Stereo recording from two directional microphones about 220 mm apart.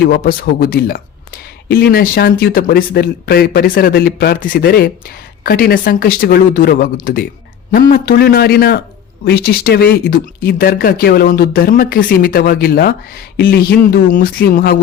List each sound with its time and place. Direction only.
0.1 s speech: 40° left (ahead or behind)